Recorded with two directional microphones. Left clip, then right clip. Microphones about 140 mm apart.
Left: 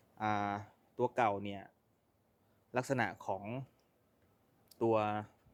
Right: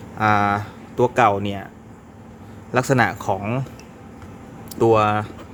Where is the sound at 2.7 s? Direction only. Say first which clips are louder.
Right 17 dB; 35° left (ahead or behind).